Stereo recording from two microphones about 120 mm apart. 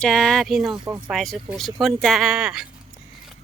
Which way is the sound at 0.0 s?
5° left (ahead or behind).